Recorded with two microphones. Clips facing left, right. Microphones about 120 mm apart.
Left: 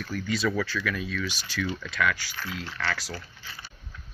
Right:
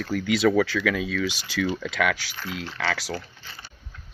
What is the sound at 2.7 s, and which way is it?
Speech, 70° right (ahead or behind).